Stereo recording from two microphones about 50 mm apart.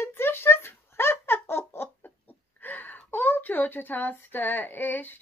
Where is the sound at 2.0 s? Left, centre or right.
Left.